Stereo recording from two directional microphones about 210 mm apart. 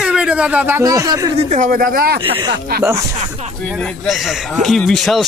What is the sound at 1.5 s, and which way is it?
Speech, 35° right (ahead or behind).